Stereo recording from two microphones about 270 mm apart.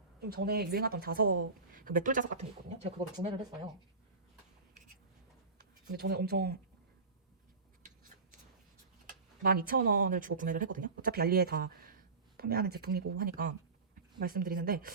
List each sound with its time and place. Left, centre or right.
0.2 s speech: right
5.9 s speech: right
7.8 s a sound: right
9.4 s speech: right